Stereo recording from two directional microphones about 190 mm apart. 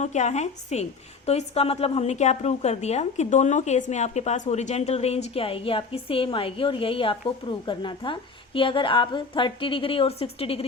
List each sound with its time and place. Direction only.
0.0 s a woman's voice: 40° left (ahead or behind)